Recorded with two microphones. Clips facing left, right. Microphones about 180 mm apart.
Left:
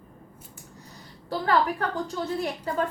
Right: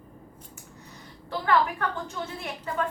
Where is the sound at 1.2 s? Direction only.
35° left (ahead or behind).